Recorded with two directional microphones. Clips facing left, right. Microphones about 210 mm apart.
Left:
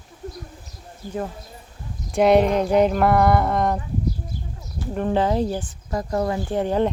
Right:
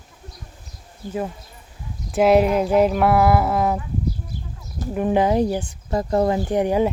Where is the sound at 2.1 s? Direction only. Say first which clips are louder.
Right 1 dB; 5° right (ahead or behind).